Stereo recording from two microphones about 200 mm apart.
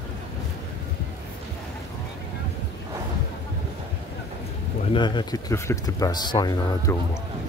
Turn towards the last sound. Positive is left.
turn(degrees=15)  # may be behind; listen again after turning